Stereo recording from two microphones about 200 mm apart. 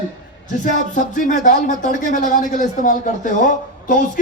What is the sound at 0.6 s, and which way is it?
Speech, 40° left (ahead or behind).